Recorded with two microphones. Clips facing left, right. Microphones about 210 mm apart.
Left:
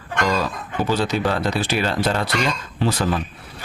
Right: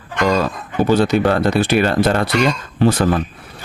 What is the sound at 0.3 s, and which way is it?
Speech, 55° right (ahead or behind).